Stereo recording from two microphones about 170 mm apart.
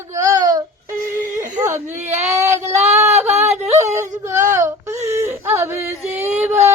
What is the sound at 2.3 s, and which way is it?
Child singing, 15° right (ahead or behind).